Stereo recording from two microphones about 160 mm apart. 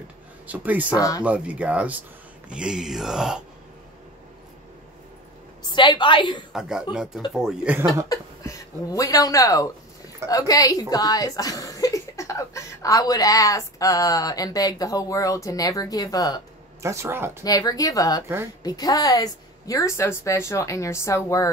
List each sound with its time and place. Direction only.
0.5 s speech: 10° right (ahead or behind)
0.8 s a woman's voice: 20° left (ahead or behind)
1.2 s speech: 10° right (ahead or behind)
5.7 s a woman's voice: 30° left (ahead or behind)
6.5 s speech: 5° right (ahead or behind)
8.1 s speech: 20° left (ahead or behind)
16.8 s speech: 15° right (ahead or behind)
17.4 s a woman's voice: 20° left (ahead or behind)